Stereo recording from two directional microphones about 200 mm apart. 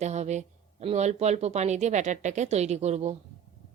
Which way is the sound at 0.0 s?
35° right (ahead or behind).